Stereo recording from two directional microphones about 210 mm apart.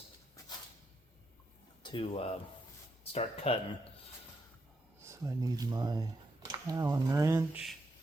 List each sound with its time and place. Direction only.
1.8 s speech: 25° left (ahead or behind)
4.9 s speech: 15° right (ahead or behind)